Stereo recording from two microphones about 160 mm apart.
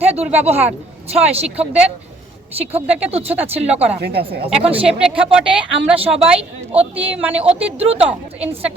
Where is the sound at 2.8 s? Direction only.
10° right (ahead or behind).